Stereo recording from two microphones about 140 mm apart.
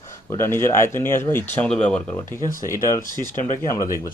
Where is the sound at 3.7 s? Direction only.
25° left (ahead or behind).